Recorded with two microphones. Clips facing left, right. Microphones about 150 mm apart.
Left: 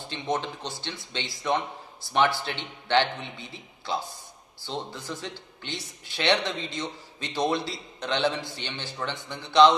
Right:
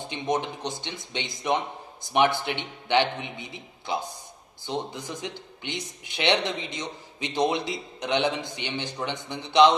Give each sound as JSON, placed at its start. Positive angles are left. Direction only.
{"t": 0.0, "sound": "a man's voice", "side_deg": -15}